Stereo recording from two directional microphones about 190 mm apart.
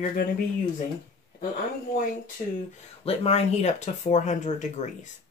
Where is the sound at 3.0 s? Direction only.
30° left (ahead or behind).